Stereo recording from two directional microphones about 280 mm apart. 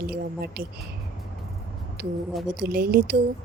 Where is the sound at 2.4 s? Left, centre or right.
Right.